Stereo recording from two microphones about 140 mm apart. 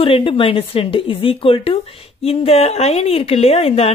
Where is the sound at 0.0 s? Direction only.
40° left (ahead or behind).